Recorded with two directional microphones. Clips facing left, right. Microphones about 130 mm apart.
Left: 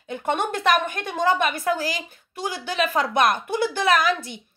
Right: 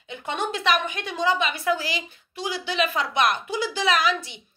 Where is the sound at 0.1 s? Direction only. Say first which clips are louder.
Left 4 dB; 50° left (ahead or behind).